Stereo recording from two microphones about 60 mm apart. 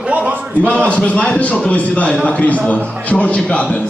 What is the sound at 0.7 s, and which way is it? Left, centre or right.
Speech, left.